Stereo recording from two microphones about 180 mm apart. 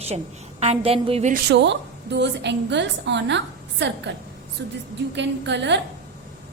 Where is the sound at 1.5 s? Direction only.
75° right (ahead or behind).